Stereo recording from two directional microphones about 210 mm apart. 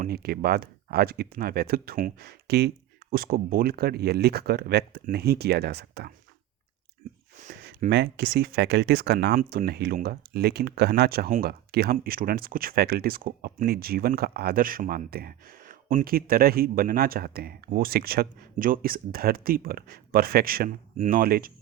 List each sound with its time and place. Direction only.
0.0 s speech: 45° right (ahead or behind)
7.6 s speech: 50° right (ahead or behind)